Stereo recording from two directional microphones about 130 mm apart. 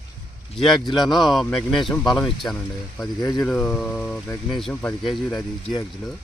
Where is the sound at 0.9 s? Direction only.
Centre (ahead or behind).